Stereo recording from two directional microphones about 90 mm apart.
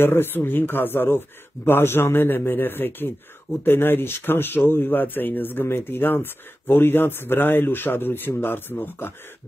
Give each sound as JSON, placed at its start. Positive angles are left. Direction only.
{"t": 0.0, "sound": "speech", "side_deg": 25}